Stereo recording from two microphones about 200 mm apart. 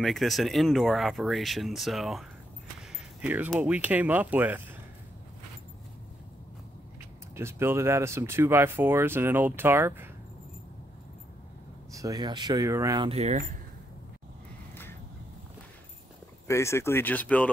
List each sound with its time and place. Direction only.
0.0 s speech: centre (ahead or behind)
7.3 s speech: 10° right (ahead or behind)
11.9 s speech: 15° right (ahead or behind)
13.1 s speech: 35° right (ahead or behind)
16.4 s speech: 15° left (ahead or behind)